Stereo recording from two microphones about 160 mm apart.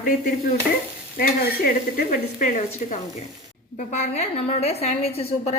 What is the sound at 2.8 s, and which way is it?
A woman's voice, 50° left (ahead or behind).